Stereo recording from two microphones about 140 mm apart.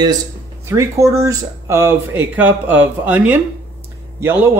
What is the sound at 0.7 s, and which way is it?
Speech, 20° right (ahead or behind).